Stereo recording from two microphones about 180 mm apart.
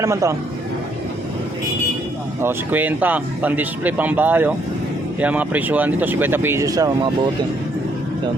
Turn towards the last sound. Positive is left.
turn(degrees=-20)  # may be behind; listen again after turning